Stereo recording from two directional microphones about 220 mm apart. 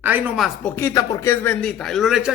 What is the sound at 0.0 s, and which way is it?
Speech, 10° right (ahead or behind).